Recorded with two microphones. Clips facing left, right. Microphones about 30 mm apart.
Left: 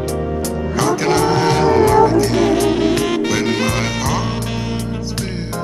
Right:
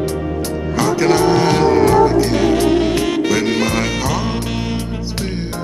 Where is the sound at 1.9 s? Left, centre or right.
Centre.